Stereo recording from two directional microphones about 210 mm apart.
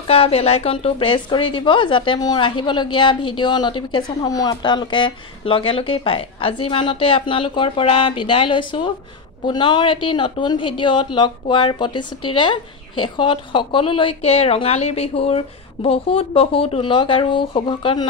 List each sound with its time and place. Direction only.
0.0 s a woman's voice: 30° left (ahead or behind)